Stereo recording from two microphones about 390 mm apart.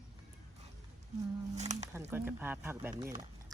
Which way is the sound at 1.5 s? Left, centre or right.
Centre.